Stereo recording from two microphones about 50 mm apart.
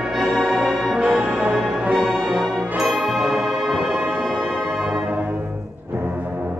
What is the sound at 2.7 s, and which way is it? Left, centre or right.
Music, centre.